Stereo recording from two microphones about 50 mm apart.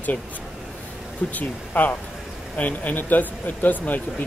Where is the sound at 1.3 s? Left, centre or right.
Left.